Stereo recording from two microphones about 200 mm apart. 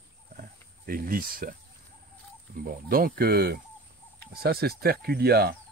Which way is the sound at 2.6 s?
45° right (ahead or behind).